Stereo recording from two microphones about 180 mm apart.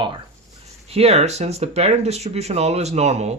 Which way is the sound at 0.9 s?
35° right (ahead or behind).